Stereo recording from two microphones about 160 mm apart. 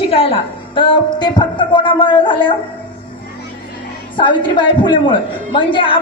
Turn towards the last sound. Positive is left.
turn(degrees=30)  # may be behind; listen again after turning